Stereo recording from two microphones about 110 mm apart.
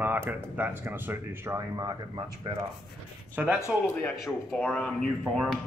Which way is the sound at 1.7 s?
35° right (ahead or behind).